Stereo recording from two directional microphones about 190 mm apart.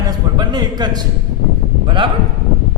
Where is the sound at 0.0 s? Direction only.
20° right (ahead or behind).